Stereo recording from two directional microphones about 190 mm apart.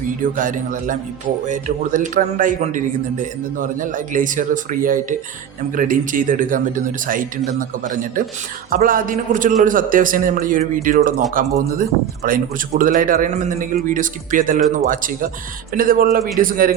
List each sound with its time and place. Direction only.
0.2 s a man's voice: 45° right (ahead or behind)